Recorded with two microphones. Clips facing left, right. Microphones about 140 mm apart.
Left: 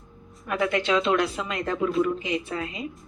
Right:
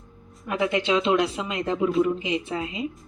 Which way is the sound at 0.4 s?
25° right (ahead or behind).